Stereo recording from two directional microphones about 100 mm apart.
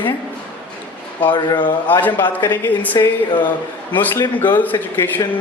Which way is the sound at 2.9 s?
50° left (ahead or behind).